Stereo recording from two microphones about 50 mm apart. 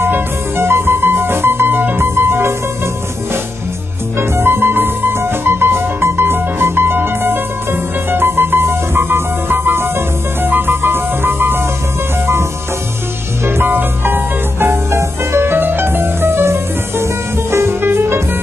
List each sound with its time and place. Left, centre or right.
0.6 s music: right
4.2 s music: right
13.7 s music: right
15.5 s music: right